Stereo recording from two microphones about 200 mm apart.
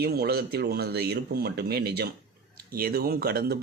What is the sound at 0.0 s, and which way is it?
Speech, 55° right (ahead or behind).